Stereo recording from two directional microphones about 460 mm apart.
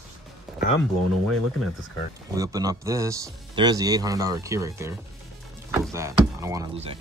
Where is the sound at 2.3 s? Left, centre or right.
Centre.